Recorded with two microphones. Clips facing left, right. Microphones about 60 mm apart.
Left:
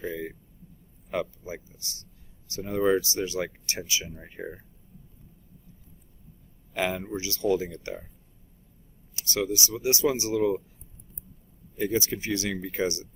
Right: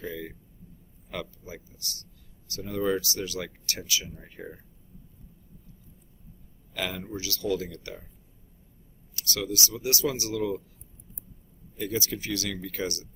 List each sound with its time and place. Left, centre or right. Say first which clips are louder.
0.0 s speech: left 3 dB; left
6.7 s speech: left 5 dB; left
9.1 s speech: left 3 dB; left
11.8 s speech: left 4 dB; left